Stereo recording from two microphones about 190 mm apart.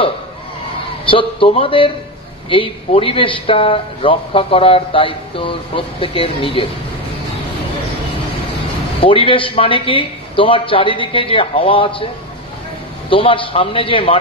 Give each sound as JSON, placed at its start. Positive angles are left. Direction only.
{"t": 1.0, "sound": "a man's voice", "side_deg": 30}
{"t": 9.0, "sound": "a man's voice", "side_deg": 30}
{"t": 13.1, "sound": "a man's voice", "side_deg": 30}